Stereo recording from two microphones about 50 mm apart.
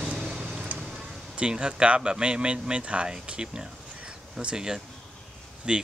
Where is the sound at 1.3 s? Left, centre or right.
Centre.